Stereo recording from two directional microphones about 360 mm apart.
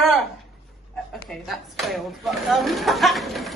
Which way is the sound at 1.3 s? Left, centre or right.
Centre.